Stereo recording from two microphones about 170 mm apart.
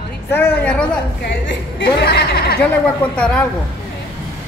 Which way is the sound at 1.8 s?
70° left (ahead or behind).